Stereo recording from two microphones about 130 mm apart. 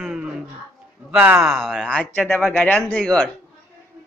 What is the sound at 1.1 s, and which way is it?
Speech, 15° right (ahead or behind).